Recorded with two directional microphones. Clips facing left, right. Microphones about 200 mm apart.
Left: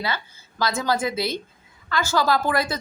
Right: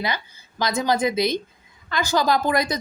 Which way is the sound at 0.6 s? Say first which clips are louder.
Right 2 dB; 20° right (ahead or behind).